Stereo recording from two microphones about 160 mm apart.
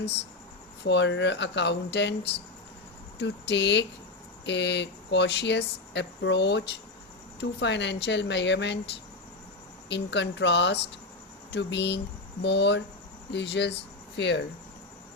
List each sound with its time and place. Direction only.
0.9 s speech: 90° left
9.9 s speech: 90° left